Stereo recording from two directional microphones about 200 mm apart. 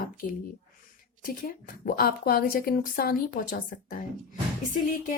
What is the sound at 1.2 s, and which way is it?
A woman's voice, 45° left (ahead or behind).